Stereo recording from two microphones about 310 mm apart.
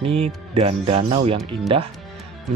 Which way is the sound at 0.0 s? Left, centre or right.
Centre.